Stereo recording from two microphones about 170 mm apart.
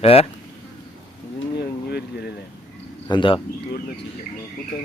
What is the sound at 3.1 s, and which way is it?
Speech, 30° left (ahead or behind).